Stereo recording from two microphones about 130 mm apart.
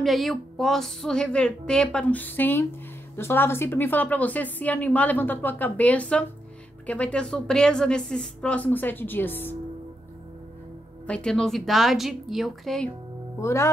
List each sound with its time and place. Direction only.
0.0 s a woman's voice: centre (ahead or behind); by 9.6 s 15° left (ahead or behind)
11.1 s a woman's voice: 5° left (ahead or behind)
13.4 s speech: 20° left (ahead or behind)